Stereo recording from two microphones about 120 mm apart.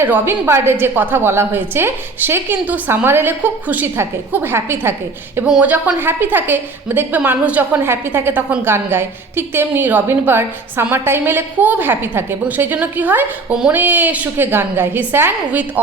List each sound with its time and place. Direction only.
0.0 s a woman's voice: 20° right (ahead or behind)